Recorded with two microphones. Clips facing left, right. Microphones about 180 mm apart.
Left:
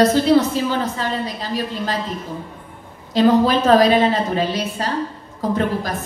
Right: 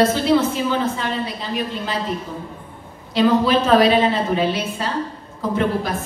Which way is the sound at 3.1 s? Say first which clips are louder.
Left 1 dB; 45° left (ahead or behind).